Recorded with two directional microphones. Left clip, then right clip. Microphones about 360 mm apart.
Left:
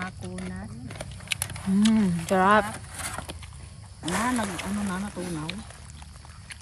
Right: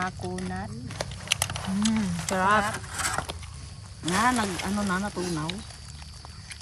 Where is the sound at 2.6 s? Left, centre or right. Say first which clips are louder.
Right 6 dB; right.